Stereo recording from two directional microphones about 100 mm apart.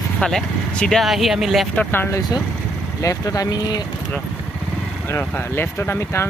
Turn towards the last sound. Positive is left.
turn(degrees=25)  # may be behind; listen again after turning